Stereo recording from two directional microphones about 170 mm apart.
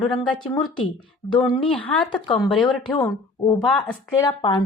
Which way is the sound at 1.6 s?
10° left (ahead or behind).